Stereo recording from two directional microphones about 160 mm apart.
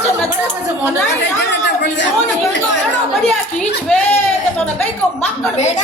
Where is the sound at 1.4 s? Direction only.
90° left.